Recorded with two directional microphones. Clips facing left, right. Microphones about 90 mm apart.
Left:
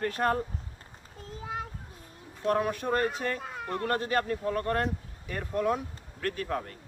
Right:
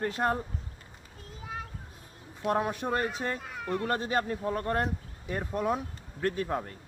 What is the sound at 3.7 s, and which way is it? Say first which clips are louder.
Speech: even; 15° right (ahead or behind).